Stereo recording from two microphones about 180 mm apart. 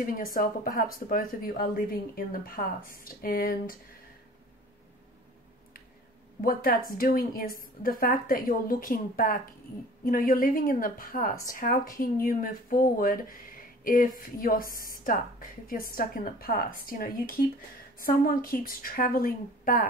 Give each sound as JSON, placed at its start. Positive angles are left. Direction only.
{"t": 0.0, "sound": "speech", "side_deg": 50}
{"t": 6.4, "sound": "speech", "side_deg": 55}